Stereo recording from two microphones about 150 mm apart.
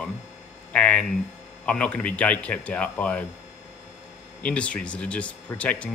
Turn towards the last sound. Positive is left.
turn(degrees=10)  # may be behind; listen again after turning